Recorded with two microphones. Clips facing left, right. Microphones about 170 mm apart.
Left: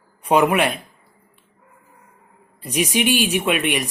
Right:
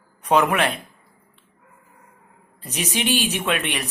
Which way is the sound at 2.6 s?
15° left (ahead or behind).